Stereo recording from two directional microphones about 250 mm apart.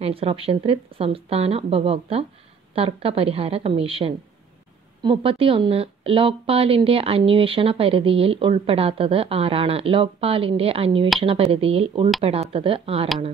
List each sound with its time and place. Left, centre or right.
0.0 s speech: right